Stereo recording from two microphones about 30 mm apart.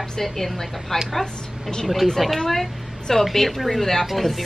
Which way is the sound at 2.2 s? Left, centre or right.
Centre.